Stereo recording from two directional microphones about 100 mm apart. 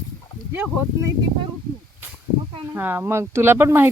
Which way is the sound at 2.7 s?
20° right (ahead or behind).